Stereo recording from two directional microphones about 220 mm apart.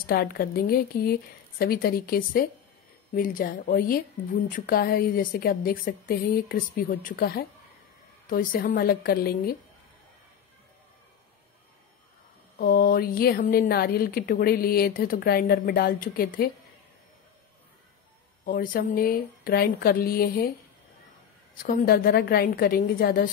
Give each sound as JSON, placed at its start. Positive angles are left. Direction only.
{"t": 0.0, "sound": "a woman's voice", "side_deg": 45}
{"t": 12.5, "sound": "speech", "side_deg": 40}
{"t": 18.4, "sound": "a woman's voice", "side_deg": 40}
{"t": 21.6, "sound": "speech", "side_deg": 45}